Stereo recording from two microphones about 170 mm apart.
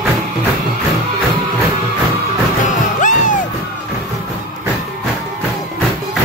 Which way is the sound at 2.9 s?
50° left (ahead or behind).